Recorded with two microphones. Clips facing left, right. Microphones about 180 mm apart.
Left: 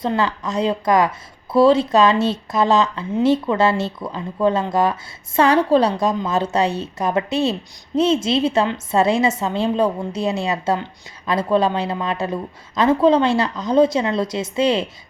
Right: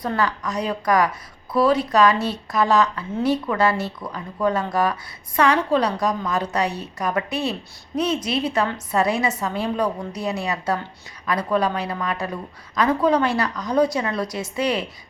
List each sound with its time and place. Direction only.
0.0 s a woman's voice: 25° left (ahead or behind)